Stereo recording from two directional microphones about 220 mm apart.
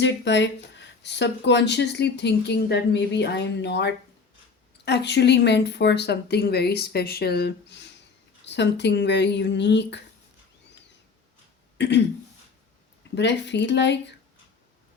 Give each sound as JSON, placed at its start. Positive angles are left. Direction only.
{"t": 0.0, "sound": "speech", "side_deg": 55}
{"t": 11.8, "sound": "speech", "side_deg": 50}
{"t": 13.1, "sound": "speech", "side_deg": 50}